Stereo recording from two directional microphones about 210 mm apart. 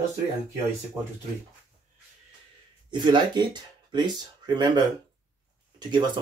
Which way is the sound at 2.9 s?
20° right (ahead or behind).